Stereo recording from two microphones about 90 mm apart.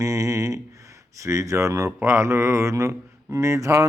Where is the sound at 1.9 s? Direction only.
25° right (ahead or behind).